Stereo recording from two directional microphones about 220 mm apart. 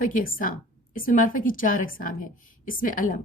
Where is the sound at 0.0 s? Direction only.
40° left (ahead or behind).